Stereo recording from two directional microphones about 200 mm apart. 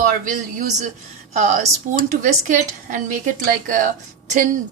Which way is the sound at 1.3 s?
35° right (ahead or behind).